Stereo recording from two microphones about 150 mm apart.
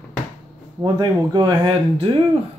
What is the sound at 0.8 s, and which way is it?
Speech, 30° right (ahead or behind).